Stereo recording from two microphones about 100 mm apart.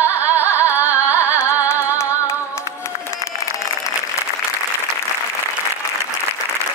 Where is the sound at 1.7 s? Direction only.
25° left (ahead or behind).